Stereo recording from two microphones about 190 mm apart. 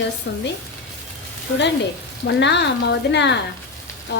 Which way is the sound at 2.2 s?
65° left (ahead or behind).